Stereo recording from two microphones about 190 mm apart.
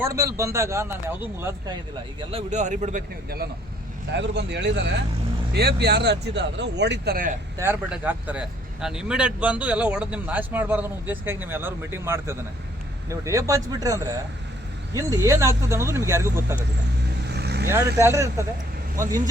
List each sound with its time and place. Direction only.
0.1 s speech: 15° right (ahead or behind)
2.3 s a man's voice: 40° right (ahead or behind)
4.2 s speech: 65° right (ahead or behind); by 7.3 s 50° right (ahead or behind)
7.6 s speech: 10° right (ahead or behind)
17.2 s vehicle: 60° right (ahead or behind)
17.9 s speech: 15° right (ahead or behind)